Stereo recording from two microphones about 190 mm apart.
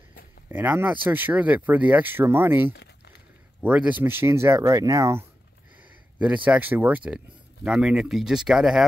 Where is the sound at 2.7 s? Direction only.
60° left (ahead or behind).